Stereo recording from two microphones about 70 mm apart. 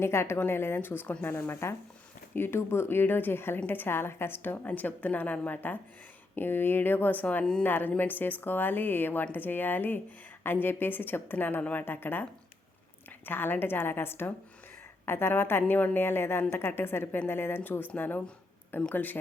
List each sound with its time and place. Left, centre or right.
0.0 s a woman's voice: left
4.5 s a woman's voice: left
13.2 s a woman's voice: left